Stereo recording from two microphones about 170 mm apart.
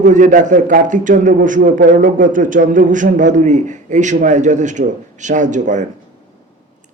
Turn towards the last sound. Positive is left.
turn(degrees=-45)  # may be behind; listen again after turning